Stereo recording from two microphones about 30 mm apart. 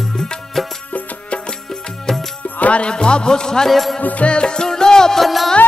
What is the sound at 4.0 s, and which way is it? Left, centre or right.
Music, left.